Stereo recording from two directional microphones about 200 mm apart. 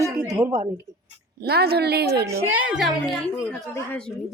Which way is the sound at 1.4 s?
55° right (ahead or behind).